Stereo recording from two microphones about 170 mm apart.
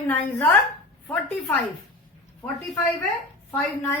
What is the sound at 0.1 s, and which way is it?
Speech, 10° left (ahead or behind).